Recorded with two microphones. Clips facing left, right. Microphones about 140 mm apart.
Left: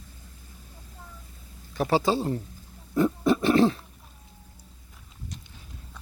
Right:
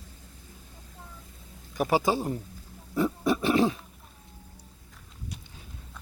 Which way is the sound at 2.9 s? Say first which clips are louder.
Left 3 dB; 10° right (ahead or behind).